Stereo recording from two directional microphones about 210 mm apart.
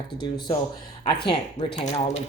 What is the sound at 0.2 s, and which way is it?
Speech, 20° left (ahead or behind).